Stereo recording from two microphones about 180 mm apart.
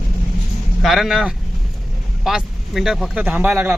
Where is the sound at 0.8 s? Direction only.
Centre (ahead or behind).